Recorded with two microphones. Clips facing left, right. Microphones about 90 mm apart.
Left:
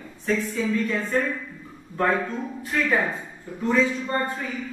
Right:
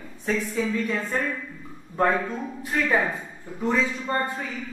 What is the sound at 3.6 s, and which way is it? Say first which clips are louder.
Speech: left 2 dB; 20° right (ahead or behind).